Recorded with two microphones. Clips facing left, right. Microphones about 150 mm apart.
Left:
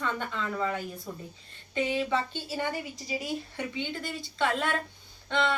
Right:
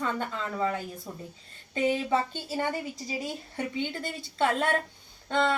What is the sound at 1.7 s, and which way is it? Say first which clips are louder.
Speech: right 2 dB; 40° right (ahead or behind).